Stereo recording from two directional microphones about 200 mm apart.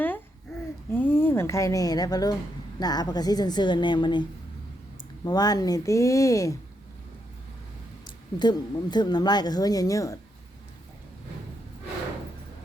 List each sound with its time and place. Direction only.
0.9 s a woman's voice: 10° left (ahead or behind)
8.0 s speech: 20° left (ahead or behind)